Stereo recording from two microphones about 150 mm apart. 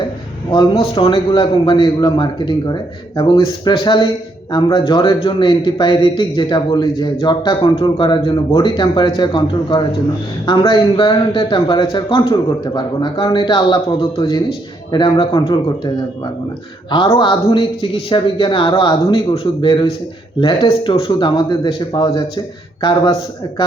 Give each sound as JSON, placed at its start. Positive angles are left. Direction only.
{"t": 0.5, "sound": "a man's voice", "side_deg": 35}
{"t": 17.2, "sound": "a man's voice", "side_deg": 35}